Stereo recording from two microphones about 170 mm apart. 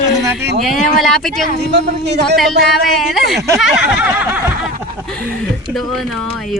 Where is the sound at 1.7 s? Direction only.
80° right.